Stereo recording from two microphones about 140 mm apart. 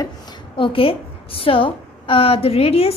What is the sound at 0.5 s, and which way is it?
A woman's voice, 40° left (ahead or behind).